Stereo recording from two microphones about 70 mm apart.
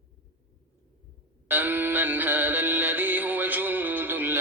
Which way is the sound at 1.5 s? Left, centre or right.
Right.